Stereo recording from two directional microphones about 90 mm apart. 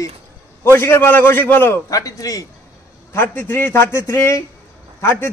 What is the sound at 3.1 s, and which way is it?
Speech, 25° left (ahead or behind).